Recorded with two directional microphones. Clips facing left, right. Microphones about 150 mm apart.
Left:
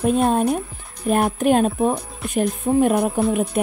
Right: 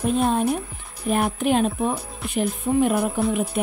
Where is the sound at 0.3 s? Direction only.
45° left (ahead or behind).